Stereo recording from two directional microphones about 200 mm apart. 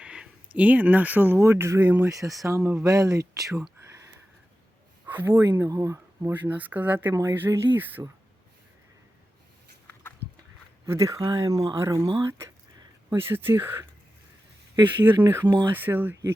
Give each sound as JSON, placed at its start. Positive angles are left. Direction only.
{"t": 0.0, "sound": "speech", "side_deg": -5}
{"t": 5.0, "sound": "speech", "side_deg": -10}
{"t": 10.8, "sound": "speech", "side_deg": -15}